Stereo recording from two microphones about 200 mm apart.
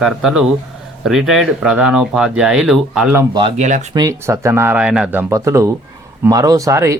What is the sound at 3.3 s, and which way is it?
Speech, 25° right (ahead or behind).